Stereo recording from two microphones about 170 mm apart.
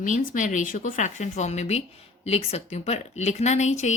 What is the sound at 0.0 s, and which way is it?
A woman's voice, 45° left (ahead or behind).